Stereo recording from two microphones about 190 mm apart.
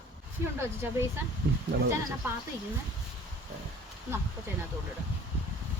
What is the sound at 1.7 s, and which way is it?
Speech, 55° right (ahead or behind).